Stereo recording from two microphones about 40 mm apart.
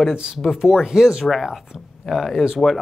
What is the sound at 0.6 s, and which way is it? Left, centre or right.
Speech, centre.